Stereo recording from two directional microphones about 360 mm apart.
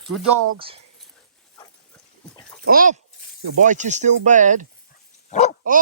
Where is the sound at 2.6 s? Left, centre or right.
Right.